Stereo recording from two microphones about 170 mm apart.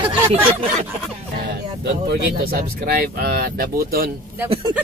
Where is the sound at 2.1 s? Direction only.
65° right (ahead or behind).